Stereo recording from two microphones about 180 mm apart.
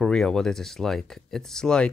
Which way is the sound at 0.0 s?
5° left (ahead or behind).